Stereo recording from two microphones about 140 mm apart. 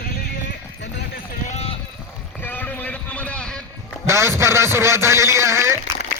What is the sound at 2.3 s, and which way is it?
Run, 10° left (ahead or behind).